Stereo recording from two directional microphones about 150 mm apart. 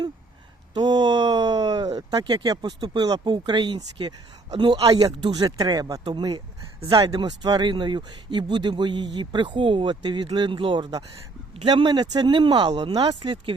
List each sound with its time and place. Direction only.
0.7 s speech: 30° right (ahead or behind)